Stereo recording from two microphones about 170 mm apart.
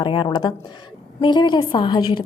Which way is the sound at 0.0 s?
30° left (ahead or behind).